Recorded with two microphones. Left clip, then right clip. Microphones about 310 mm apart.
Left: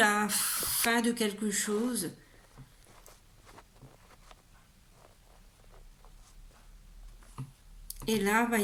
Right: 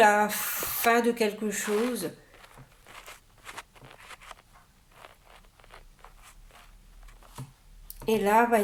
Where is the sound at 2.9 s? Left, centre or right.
Right.